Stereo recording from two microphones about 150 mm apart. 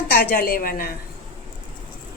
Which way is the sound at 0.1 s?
90° left.